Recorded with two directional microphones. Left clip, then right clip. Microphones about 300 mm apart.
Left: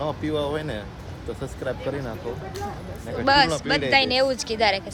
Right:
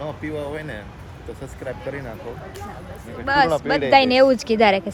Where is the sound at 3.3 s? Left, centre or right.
Centre.